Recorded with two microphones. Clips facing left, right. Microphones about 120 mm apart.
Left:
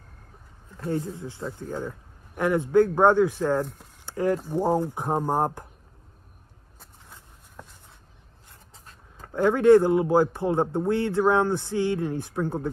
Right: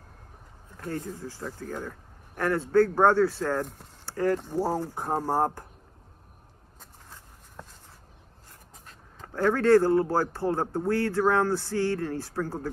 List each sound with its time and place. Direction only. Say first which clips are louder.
0.7 s speech: left 5 dB; 25° left (ahead or behind)
4.0 s a sound: left 1 dB; 20° left (ahead or behind)
4.5 s speech: left 4 dB; 20° left (ahead or behind)
9.3 s speech: left 4 dB; 20° left (ahead or behind)